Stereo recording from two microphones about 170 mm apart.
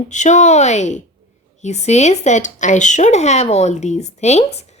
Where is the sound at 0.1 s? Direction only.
45° left (ahead or behind).